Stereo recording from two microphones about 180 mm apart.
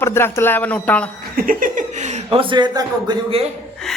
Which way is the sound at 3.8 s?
5° left (ahead or behind).